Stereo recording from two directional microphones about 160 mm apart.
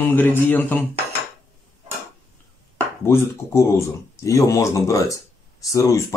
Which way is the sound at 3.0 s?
15° left (ahead or behind).